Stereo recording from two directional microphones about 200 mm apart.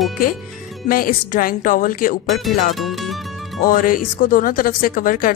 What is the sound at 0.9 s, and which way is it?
Speech, 45° left (ahead or behind).